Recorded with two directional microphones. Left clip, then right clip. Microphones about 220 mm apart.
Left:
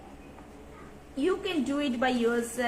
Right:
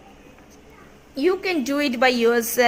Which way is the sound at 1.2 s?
40° right (ahead or behind).